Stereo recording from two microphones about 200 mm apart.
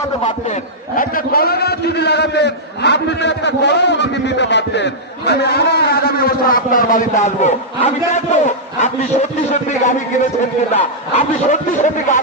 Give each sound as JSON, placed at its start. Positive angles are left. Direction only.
{"t": 0.2, "sound": "a man's voice", "side_deg": 40}